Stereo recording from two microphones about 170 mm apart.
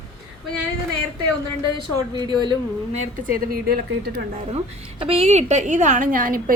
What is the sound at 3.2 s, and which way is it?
A woman's voice, 55° right (ahead or behind).